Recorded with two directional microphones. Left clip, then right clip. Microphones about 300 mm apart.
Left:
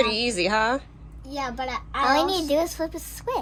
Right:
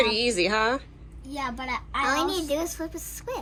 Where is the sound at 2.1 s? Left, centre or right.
Left.